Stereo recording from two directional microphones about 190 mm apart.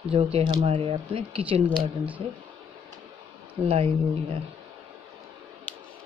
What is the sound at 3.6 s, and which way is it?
Speech, 30° right (ahead or behind).